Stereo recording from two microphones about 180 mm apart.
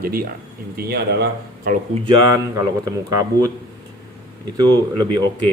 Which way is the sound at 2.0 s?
20° right (ahead or behind).